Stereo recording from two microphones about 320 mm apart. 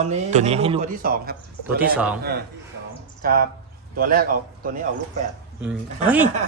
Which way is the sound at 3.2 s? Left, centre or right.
Right.